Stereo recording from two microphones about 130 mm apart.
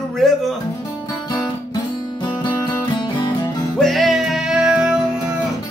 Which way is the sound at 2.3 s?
35° left (ahead or behind).